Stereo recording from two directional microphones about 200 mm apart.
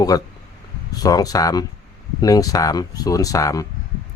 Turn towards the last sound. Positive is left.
turn(degrees=15)  # may be behind; listen again after turning